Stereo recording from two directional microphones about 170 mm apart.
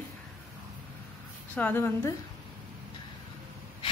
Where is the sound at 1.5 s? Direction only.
10° left (ahead or behind).